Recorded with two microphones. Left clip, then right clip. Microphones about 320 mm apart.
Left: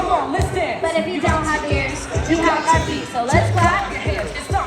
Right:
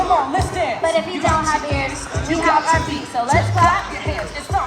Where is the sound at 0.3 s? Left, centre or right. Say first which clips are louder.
Right 1 dB; centre.